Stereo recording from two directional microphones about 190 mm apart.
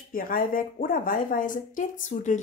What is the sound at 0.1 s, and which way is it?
A woman's voice, 50° left (ahead or behind).